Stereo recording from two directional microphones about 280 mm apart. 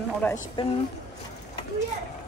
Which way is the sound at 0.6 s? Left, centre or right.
Centre.